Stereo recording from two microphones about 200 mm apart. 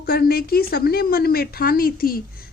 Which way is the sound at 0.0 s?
50° left (ahead or behind).